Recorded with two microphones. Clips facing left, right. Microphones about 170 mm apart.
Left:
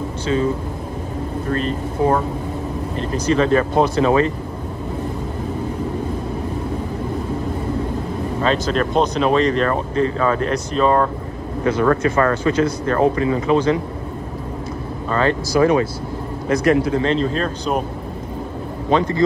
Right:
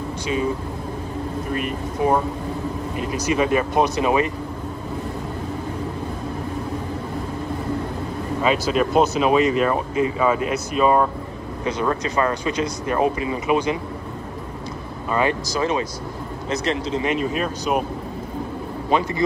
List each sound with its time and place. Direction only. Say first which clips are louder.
1.5 s speech: left 6 dB; 15° right (ahead or behind)
8.4 s speech: even; 10° right (ahead or behind)
15.0 s speech: left 2 dB; 10° right (ahead or behind)
17.0 s speech: left 3 dB; 10° right (ahead or behind)
18.9 s speech: left 4 dB; 15° right (ahead or behind)